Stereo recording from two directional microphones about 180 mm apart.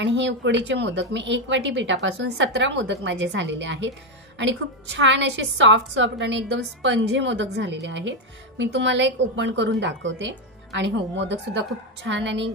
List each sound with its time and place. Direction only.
0.0 s a woman's voice: 75° right (ahead or behind)
10.8 s speech: 75° right (ahead or behind)
12.1 s a woman's voice: 90° right